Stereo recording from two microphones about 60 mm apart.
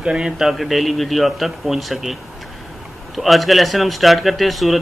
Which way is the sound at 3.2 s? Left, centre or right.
Centre.